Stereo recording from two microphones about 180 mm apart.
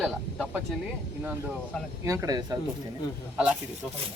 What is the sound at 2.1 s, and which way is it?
Speech, 20° right (ahead or behind).